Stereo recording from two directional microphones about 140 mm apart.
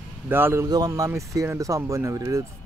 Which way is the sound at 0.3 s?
15° right (ahead or behind).